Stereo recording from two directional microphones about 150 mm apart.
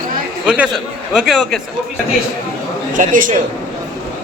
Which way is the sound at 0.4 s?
5° right (ahead or behind).